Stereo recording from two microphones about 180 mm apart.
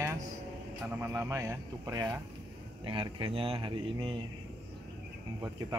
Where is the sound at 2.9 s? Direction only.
30° right (ahead or behind).